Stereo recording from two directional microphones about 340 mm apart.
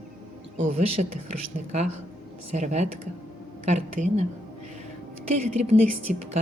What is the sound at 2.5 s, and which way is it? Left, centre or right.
A woman's voice, right.